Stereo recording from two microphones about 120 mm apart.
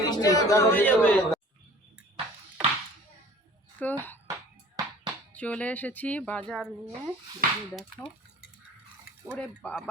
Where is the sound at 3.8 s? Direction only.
15° left (ahead or behind).